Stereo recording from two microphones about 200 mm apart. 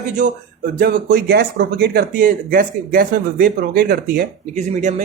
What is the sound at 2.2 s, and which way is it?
Speech, 45° right (ahead or behind).